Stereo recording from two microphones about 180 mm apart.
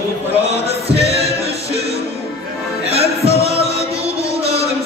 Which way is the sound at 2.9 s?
35° right (ahead or behind).